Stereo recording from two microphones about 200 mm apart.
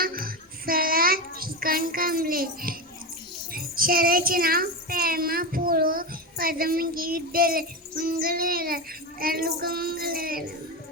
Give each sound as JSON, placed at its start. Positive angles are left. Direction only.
{"t": 0.0, "sound": "child singing", "side_deg": -45}
{"t": 3.5, "sound": "a child's voice", "side_deg": -45}